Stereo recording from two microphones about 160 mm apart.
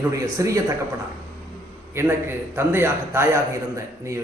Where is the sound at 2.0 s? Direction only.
15° right (ahead or behind).